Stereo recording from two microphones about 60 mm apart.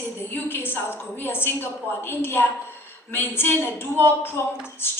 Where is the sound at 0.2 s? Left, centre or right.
Left.